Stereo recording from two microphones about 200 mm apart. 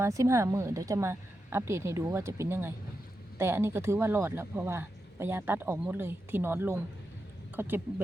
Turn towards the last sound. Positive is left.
turn(degrees=-10)  # may be behind; listen again after turning